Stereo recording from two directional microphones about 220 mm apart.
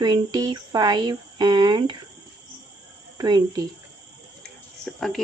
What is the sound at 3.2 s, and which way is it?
Speech, 20° right (ahead or behind).